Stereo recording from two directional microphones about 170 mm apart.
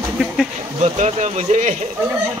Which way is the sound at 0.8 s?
40° right (ahead or behind).